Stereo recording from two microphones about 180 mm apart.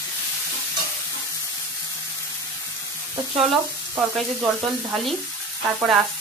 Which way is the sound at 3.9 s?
10° right (ahead or behind).